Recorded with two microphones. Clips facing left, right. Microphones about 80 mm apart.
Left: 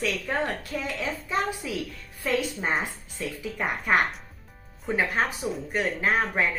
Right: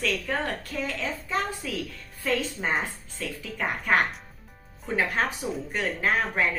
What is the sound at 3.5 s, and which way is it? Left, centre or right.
Speech, centre.